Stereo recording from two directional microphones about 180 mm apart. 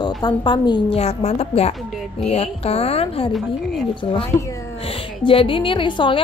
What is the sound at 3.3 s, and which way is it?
Speech, centre (ahead or behind).